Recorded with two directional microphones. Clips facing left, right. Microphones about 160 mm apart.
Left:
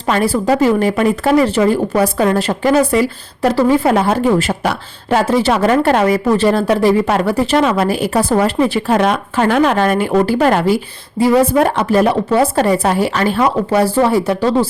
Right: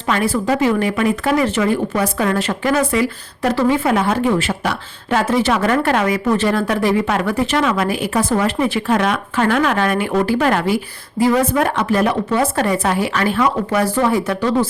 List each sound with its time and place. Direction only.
0.1 s speech: 35° left (ahead or behind)